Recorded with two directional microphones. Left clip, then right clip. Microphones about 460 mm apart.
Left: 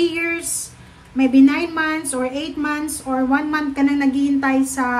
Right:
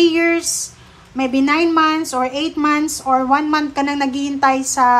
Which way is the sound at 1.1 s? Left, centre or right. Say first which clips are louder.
Left 1 dB; centre.